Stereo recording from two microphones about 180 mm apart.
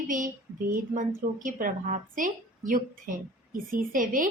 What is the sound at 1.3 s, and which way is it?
A woman's voice, 50° right (ahead or behind).